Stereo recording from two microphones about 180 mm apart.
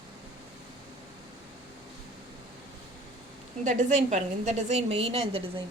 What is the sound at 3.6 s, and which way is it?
A woman's voice, 45° right (ahead or behind).